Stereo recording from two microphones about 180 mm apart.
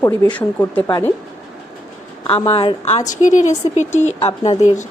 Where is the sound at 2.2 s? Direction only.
30° left (ahead or behind).